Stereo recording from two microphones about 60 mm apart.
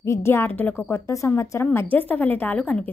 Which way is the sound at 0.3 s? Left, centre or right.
Left.